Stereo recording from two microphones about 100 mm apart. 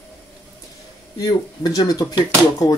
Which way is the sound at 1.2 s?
40° left (ahead or behind).